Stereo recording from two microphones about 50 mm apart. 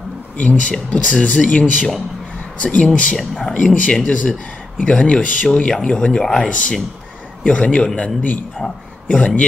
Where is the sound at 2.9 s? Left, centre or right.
Left.